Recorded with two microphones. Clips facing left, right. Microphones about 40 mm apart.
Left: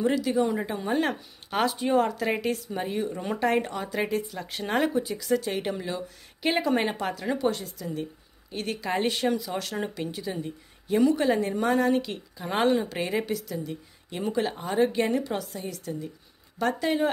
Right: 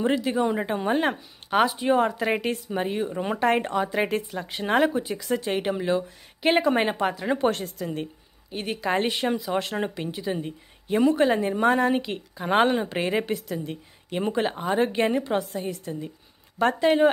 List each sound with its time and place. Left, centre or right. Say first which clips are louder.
0.0 s a woman's voice: right 1 dB; right
0.9 s speech: right 2 dB; centre
4.4 s speech: right 6 dB; centre
5.0 s speech: even; right
7.4 s speech: right 3 dB; right
8.5 s a woman's voice: right 3 dB; centre